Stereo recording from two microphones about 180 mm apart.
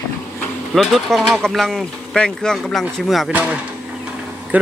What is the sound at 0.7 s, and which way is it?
Speech, centre (ahead or behind).